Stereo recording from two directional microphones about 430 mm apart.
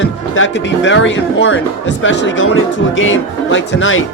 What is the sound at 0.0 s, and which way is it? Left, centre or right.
Speech, left.